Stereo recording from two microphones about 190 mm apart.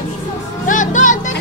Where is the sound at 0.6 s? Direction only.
40° left (ahead or behind).